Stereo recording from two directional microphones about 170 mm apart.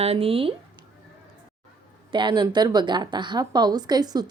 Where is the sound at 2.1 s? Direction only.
25° right (ahead or behind).